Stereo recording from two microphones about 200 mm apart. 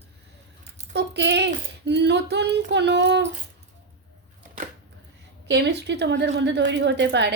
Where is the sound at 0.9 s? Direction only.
60° right (ahead or behind).